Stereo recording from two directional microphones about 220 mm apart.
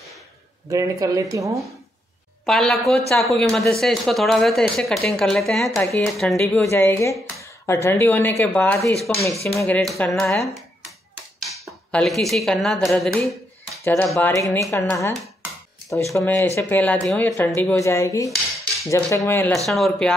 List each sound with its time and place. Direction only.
0.7 s speech: 15° right (ahead or behind)
2.4 s speech: centre (ahead or behind)
11.6 s speech: centre (ahead or behind)
16.2 s speech: 15° left (ahead or behind)